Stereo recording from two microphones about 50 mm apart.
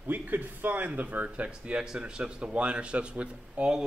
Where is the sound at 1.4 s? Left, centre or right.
Right.